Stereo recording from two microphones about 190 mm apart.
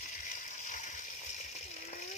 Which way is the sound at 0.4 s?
40° left (ahead or behind).